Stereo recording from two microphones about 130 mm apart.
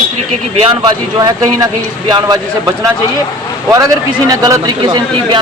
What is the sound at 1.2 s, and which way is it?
Speech, 30° right (ahead or behind).